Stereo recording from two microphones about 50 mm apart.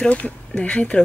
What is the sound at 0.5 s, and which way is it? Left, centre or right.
Speech, centre.